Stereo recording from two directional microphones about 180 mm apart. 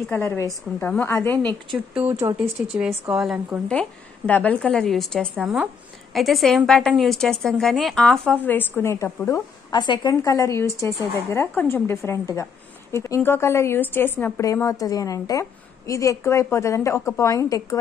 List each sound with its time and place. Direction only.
0.1 s a woman's voice: 15° left (ahead or behind)
1.3 s a woman's voice: 25° right (ahead or behind)
2.3 s a woman's voice: 5° right (ahead or behind)
4.3 s a woman's voice: 10° left (ahead or behind)